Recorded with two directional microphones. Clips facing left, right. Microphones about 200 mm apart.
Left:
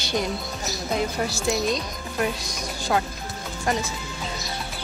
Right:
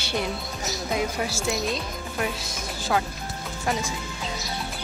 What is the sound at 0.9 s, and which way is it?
Speech, 5° right (ahead or behind).